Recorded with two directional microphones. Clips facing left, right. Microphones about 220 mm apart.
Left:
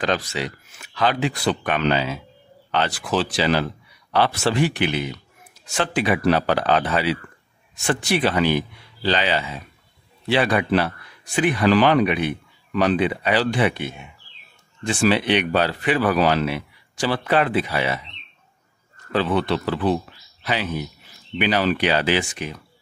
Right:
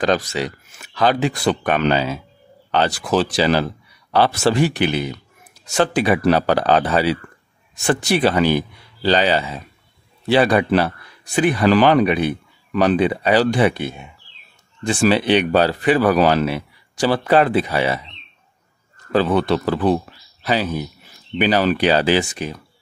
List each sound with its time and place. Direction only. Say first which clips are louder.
0.0 s speech: right 5 dB; 45° right (ahead or behind)
19.1 s speech: right 4 dB; 40° right (ahead or behind)